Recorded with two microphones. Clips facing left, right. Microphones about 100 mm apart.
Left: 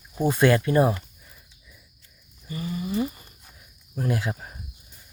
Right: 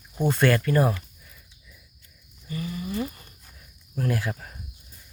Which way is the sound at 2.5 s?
25° left (ahead or behind).